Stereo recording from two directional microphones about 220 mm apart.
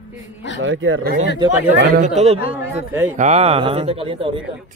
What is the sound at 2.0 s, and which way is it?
Speech, 30° right (ahead or behind).